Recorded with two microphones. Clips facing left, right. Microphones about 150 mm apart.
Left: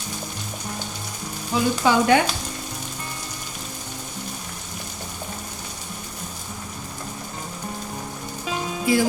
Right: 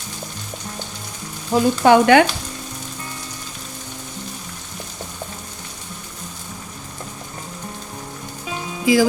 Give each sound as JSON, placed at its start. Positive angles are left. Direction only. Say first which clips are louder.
{"t": 1.5, "sound": "frying", "louder": "right 6 dB", "side_deg": -60}
{"t": 8.9, "sound": "music", "louder": "right 5 dB", "side_deg": -90}